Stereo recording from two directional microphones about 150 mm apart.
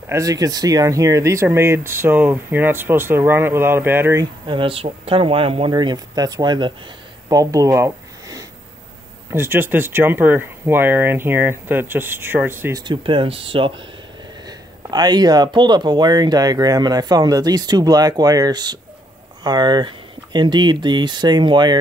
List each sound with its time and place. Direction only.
0.1 s speech: 25° right (ahead or behind)
4.5 s speech: 35° right (ahead or behind)
7.2 s a sound: 25° right (ahead or behind)
9.3 s speech: 15° right (ahead or behind)
12.8 s speech: 35° right (ahead or behind)